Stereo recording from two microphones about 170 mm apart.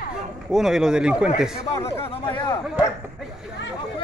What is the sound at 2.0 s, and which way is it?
Speech, 30° left (ahead or behind).